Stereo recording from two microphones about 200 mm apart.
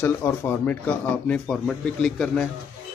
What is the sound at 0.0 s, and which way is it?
Speech, 10° left (ahead or behind).